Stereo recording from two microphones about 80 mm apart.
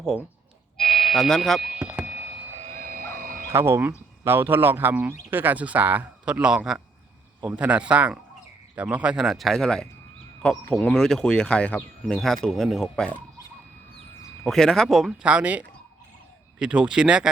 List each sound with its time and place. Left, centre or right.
0.9 s a man's voice: centre
1.8 s a sound: centre
3.5 s a man's voice: right; by 13.1 s centre
14.4 s a man's voice: centre
15.2 s speech: centre